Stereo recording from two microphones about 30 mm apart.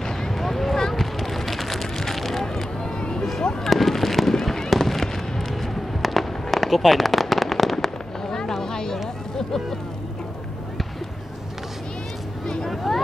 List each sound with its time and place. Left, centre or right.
0.2 s a sound: centre
3.0 s music: left
3.7 s fireworks: centre
6.0 s firecracker: centre
7.7 s fireworks: centre
8.6 s a sound: left
12.6 s vehicle: centre